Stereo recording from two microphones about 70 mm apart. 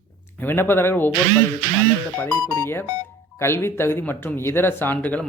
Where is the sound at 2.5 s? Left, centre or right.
Left.